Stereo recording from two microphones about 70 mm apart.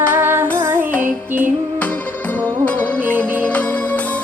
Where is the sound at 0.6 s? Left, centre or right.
Right.